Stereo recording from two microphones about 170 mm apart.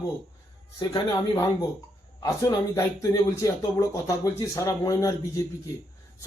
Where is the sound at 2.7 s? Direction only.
20° left (ahead or behind).